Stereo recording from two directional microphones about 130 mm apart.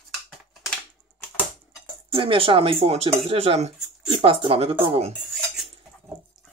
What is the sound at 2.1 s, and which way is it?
Speech, 45° right (ahead or behind).